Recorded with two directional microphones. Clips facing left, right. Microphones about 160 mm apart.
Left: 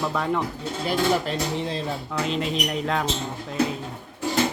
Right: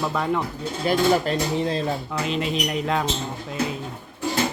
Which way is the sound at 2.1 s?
5° right (ahead or behind).